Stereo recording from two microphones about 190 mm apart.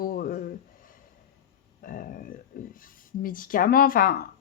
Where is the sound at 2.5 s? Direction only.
50° left (ahead or behind).